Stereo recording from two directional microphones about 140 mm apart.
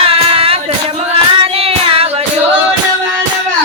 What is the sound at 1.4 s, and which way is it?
Child singing, 45° right (ahead or behind).